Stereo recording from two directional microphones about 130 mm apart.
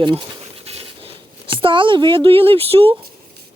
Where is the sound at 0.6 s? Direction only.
45° right (ahead or behind).